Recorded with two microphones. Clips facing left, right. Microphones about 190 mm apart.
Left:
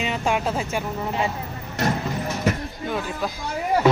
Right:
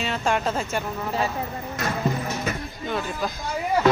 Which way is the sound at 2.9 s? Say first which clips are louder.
Even; 5° left (ahead or behind).